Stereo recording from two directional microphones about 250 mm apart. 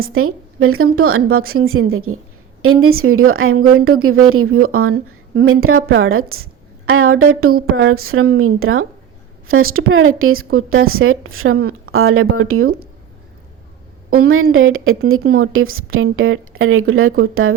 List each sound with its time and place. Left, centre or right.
0.1 s a woman's voice: right
14.2 s a woman's voice: right